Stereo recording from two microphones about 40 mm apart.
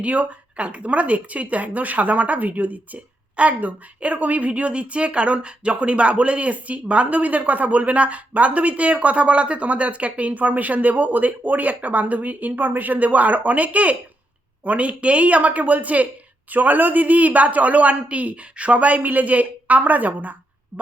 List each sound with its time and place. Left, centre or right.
0.0 s a woman's voice: right